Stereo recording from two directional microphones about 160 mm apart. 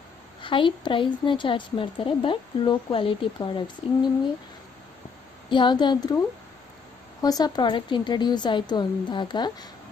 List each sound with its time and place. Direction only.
0.4 s a woman's voice: 30° left (ahead or behind)
5.5 s a woman's voice: 30° left (ahead or behind)